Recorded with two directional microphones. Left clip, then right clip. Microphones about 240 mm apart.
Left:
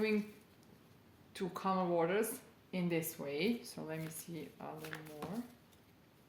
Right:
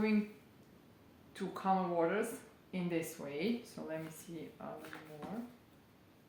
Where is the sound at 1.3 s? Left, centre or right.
Left.